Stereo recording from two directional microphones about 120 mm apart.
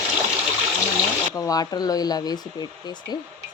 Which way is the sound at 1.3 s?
30° left (ahead or behind).